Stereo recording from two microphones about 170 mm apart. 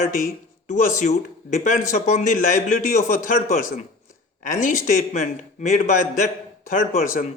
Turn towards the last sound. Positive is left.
turn(degrees=50)  # may be behind; listen again after turning